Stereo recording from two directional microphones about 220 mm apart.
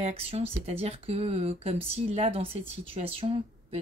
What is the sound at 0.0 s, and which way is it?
Speech, 25° right (ahead or behind).